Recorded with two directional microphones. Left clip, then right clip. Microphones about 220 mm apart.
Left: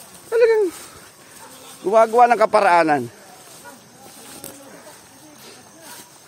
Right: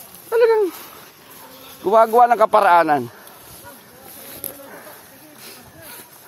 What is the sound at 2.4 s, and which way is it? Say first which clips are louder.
Speech: right 1 dB; 10° right (ahead or behind).